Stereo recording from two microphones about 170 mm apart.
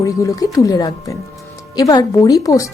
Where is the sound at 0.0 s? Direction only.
20° left (ahead or behind).